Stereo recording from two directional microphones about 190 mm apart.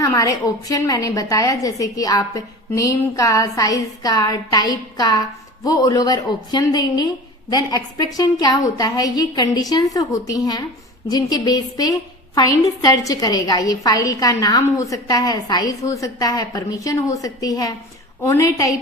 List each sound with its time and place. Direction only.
0.0 s a woman's voice: 15° left (ahead or behind)